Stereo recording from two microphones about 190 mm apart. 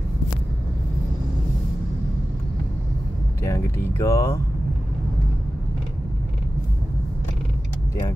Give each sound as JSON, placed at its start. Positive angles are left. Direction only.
{"t": 3.4, "sound": "speech", "side_deg": 15}